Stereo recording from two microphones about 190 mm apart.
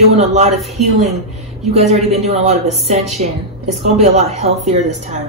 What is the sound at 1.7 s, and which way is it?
A woman's voice, 35° right (ahead or behind).